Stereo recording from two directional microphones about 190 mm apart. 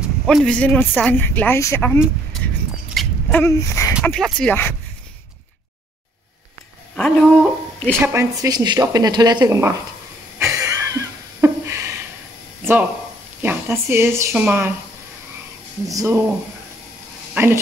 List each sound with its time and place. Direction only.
0.3 s speech: 5° left (ahead or behind)
2.4 s a sound: 5° left (ahead or behind)
4.0 s speech: 5° left (ahead or behind)
7.0 s speech: 5° left (ahead or behind)
8.0 s speech: 15° right (ahead or behind)
10.4 s a sound: 15° right (ahead or behind)
13.4 s speech: 10° right (ahead or behind)
15.9 s speech: 15° right (ahead or behind)
17.3 s a sound: 10° right (ahead or behind)